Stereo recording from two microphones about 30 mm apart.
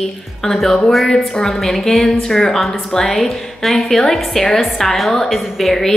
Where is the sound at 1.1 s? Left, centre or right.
Centre.